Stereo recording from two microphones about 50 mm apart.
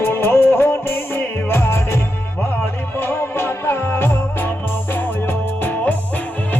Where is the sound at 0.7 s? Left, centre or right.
Left.